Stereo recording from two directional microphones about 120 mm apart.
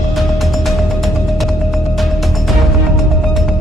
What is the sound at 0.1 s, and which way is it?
Music, centre (ahead or behind).